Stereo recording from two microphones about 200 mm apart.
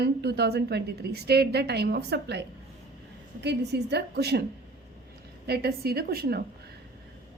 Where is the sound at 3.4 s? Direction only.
55° right (ahead or behind).